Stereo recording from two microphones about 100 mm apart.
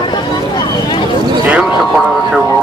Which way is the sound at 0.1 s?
50° left (ahead or behind).